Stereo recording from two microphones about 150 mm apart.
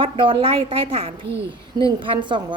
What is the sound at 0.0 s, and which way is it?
A woman's voice, 35° right (ahead or behind).